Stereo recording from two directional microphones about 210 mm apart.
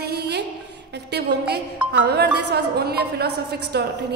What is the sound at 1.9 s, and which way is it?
A woman's voice, 50° right (ahead or behind).